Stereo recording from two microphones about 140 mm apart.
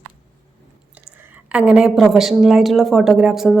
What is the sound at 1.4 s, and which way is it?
Speech, 5° right (ahead or behind).